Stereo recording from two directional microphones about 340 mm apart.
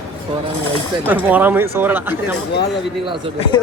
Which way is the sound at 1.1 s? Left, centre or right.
Centre.